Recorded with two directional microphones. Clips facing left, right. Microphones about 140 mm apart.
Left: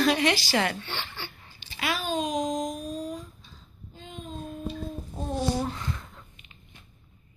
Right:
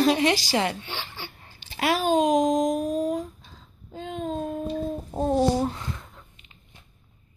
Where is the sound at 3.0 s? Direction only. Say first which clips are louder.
Right 9 dB; 55° right (ahead or behind).